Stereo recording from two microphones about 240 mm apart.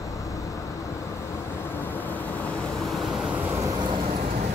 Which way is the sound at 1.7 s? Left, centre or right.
Centre.